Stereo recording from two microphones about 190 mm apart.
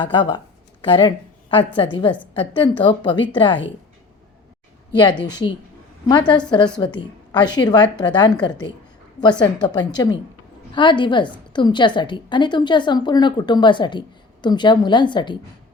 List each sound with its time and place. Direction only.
0.0 s a woman's voice: 25° left (ahead or behind)
4.9 s a woman's voice: 25° left (ahead or behind)